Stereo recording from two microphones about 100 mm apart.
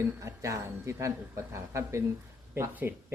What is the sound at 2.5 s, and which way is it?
Speech, 20° right (ahead or behind).